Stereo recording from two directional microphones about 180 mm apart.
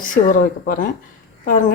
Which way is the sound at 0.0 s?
50° left (ahead or behind).